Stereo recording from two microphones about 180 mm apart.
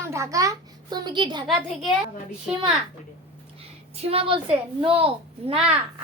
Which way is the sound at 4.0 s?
30° right (ahead or behind).